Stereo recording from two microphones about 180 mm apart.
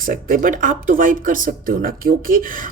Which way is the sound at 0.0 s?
55° right (ahead or behind).